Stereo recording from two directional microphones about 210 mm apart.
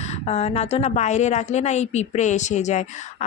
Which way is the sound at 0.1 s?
30° left (ahead or behind).